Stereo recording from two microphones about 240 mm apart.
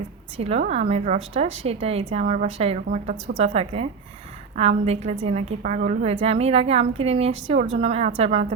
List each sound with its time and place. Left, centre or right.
0.3 s a woman's voice: right